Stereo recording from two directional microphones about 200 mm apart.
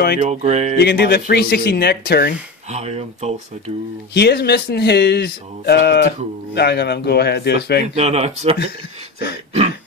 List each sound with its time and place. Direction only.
0.2 s speech: 35° right (ahead or behind)
0.7 s speech: 55° left (ahead or behind)
2.7 s speech: 30° right (ahead or behind)
4.1 s speech: 55° left (ahead or behind)
7.8 s speech: 30° right (ahead or behind)